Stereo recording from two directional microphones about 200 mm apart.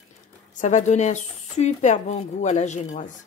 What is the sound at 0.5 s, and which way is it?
Speech, 35° left (ahead or behind).